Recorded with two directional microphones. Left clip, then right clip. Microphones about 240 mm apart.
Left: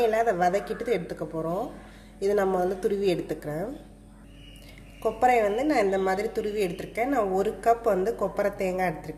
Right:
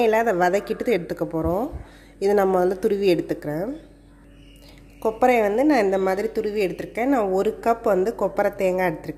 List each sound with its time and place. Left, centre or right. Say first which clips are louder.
0.0 s a woman's voice: right 4 dB; right
5.0 s a woman's voice: right 3 dB; right